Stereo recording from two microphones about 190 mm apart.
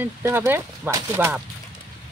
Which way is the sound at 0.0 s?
15° right (ahead or behind).